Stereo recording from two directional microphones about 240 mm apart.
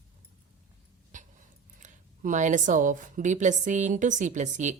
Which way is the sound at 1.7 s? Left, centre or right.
Right.